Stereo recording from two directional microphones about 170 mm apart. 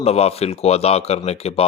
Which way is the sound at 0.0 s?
35° left (ahead or behind).